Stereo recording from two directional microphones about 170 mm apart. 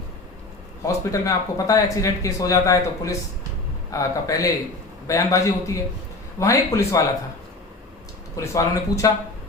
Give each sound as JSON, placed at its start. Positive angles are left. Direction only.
{"t": 0.9, "sound": "speech", "side_deg": 20}
{"t": 8.4, "sound": "speech", "side_deg": 20}